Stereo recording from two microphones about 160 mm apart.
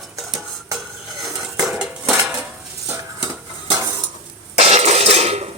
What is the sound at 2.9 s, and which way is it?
Stir, 15° right (ahead or behind).